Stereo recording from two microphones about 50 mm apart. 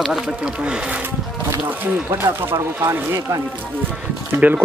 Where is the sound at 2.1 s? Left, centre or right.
Right.